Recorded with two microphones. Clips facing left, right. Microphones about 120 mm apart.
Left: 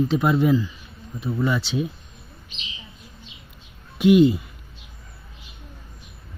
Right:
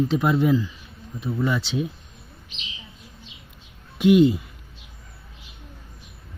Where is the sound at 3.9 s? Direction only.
10° left (ahead or behind).